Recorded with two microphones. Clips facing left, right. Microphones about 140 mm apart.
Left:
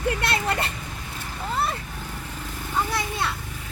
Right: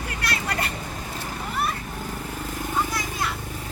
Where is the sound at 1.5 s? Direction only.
25° left (ahead or behind).